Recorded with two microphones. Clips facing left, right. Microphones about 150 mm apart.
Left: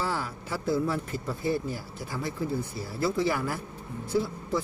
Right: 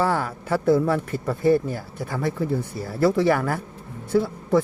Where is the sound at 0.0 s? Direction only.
55° right (ahead or behind).